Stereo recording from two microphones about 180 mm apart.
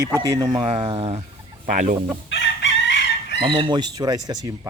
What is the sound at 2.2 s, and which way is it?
Chicken, 85° left.